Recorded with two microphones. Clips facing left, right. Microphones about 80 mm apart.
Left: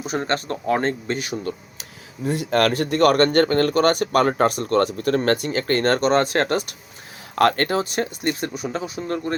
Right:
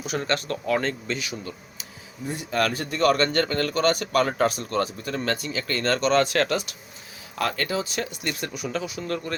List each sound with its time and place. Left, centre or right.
0.0 s speech: left
2.2 s speech: left
7.3 s speech: left